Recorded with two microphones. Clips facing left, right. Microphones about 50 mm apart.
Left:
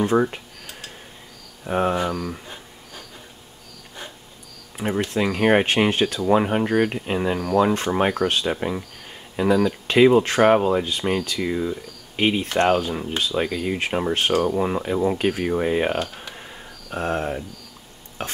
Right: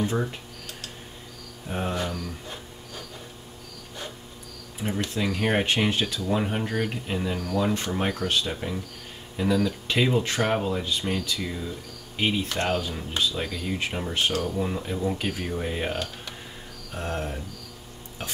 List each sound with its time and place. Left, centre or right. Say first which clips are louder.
0.0 s speech: left 8 dB; left
1.7 s speech: left 8 dB; left
2.4 s a sound: even; centre
4.7 s speech: left 6 dB; left
18.2 s stir: left 5 dB; left